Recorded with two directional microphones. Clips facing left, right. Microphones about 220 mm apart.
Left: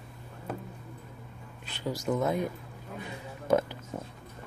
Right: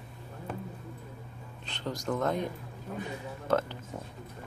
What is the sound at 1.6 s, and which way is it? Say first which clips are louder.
Speech: left 2 dB; 5° left (ahead or behind).